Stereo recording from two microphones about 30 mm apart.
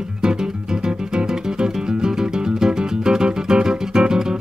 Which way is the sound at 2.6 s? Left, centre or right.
Right.